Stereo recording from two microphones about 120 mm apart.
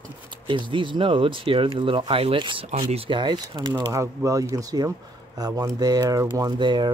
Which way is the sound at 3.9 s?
25° right (ahead or behind).